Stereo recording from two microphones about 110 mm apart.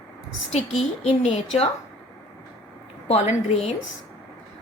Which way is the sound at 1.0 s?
65° left (ahead or behind).